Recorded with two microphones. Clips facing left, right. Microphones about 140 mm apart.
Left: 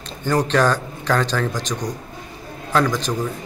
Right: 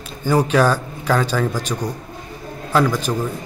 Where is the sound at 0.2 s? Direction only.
10° right (ahead or behind).